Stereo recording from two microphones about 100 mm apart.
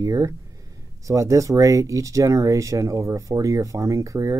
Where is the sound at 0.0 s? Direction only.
30° right (ahead or behind).